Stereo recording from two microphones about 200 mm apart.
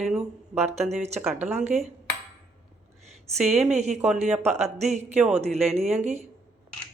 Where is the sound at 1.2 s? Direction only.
5° right (ahead or behind).